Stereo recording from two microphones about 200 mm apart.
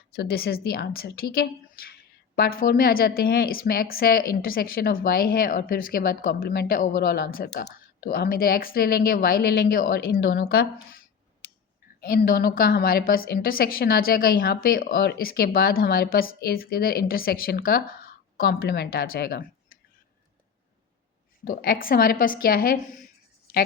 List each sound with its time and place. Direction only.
0.1 s a woman's voice: 50° left (ahead or behind)
11.9 s a woman's voice: 50° left (ahead or behind)
21.4 s a woman's voice: 50° left (ahead or behind)